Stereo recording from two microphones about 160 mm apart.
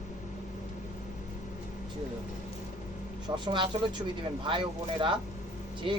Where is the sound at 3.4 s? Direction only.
30° right (ahead or behind).